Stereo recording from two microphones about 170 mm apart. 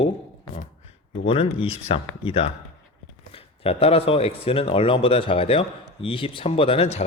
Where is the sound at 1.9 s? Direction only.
35° left (ahead or behind).